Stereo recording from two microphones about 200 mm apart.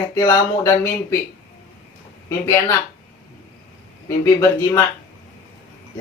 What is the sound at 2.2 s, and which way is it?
Speech, 15° left (ahead or behind).